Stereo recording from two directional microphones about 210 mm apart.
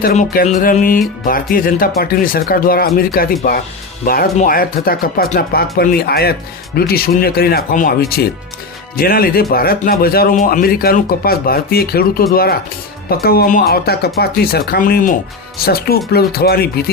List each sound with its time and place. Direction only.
0.0 s music: 40° left (ahead or behind)
2.0 s speech: 45° left (ahead or behind)